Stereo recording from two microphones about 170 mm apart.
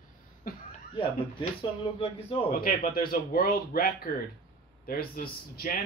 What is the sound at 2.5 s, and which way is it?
Speech, 55° left (ahead or behind).